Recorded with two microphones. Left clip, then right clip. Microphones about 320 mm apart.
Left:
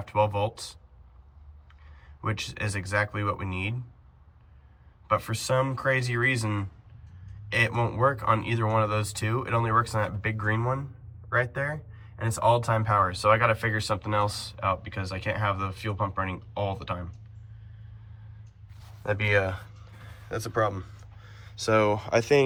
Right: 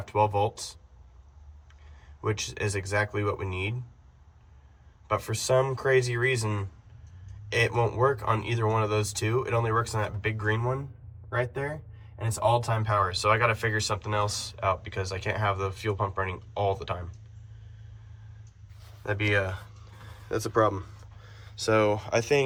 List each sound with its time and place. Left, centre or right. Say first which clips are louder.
0.0 s speech: right 1 dB; centre
2.0 s speech: right 1 dB; centre
5.0 s speech: left 1 dB; centre
19.0 s speech: left 2 dB; centre